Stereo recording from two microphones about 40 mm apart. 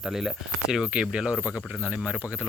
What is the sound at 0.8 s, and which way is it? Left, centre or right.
Speech, right.